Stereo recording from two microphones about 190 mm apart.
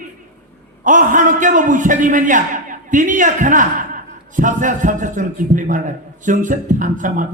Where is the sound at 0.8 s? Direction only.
40° right (ahead or behind).